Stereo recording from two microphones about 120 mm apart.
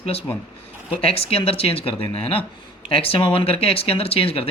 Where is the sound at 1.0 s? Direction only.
55° left (ahead or behind).